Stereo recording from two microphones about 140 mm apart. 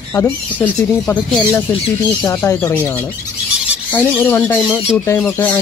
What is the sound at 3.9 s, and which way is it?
Speech, 10° left (ahead or behind).